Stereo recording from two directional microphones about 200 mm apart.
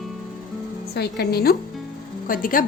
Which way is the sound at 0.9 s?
55° left (ahead or behind).